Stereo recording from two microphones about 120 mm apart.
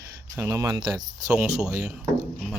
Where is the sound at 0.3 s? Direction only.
25° right (ahead or behind).